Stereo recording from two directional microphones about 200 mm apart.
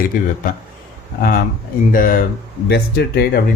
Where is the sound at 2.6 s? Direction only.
55° left (ahead or behind).